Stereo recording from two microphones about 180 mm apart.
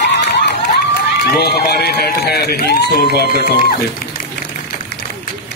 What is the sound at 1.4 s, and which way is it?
Speech, 65° left (ahead or behind).